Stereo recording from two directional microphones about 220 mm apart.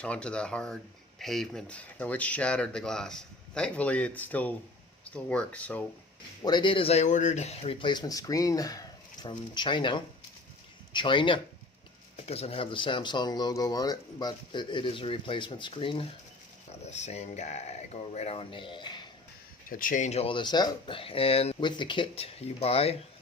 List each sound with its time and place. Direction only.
0.0 s speech: 5° left (ahead or behind)
6.4 s speech: 20° left (ahead or behind)
19.7 s speech: 40° left (ahead or behind)